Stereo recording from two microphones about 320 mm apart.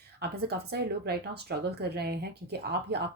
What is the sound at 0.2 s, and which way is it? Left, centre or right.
Speech, right.